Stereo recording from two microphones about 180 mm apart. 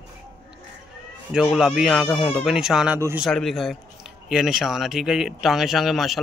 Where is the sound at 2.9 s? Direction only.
15° right (ahead or behind).